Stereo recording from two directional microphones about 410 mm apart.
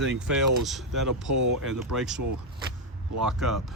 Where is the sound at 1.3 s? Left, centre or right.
Right.